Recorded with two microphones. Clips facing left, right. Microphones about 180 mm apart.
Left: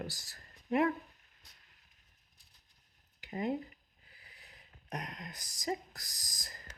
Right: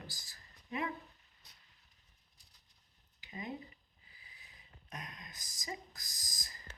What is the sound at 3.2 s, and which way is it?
Speech, 60° left (ahead or behind).